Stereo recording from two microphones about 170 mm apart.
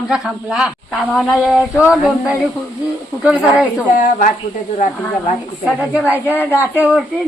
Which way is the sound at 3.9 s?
50° left (ahead or behind).